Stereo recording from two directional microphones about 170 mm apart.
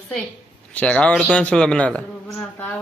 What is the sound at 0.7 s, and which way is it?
A man's voice, 10° left (ahead or behind).